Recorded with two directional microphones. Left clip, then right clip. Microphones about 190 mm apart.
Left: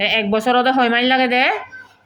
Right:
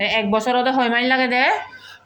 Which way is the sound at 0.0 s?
20° left (ahead or behind).